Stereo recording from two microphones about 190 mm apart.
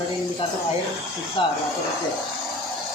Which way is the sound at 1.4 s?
25° left (ahead or behind).